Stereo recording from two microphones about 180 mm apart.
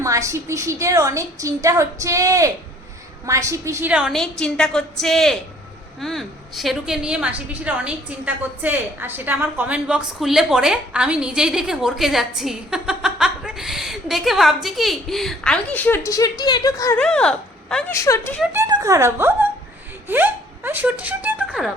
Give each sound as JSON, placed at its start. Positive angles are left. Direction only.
{"t": 0.0, "sound": "a woman's voice", "side_deg": -15}
{"t": 17.0, "sound": "speech", "side_deg": 5}
{"t": 17.9, "sound": "speech", "side_deg": 15}
{"t": 18.5, "sound": "a woman's voice", "side_deg": -15}